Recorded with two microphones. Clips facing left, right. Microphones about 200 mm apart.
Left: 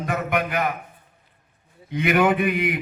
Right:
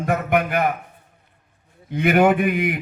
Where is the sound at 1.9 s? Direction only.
50° right (ahead or behind).